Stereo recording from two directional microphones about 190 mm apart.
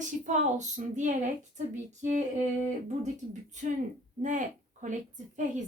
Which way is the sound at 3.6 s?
40° right (ahead or behind).